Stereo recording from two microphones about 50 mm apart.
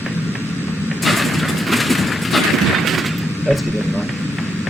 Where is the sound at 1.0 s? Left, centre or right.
Centre.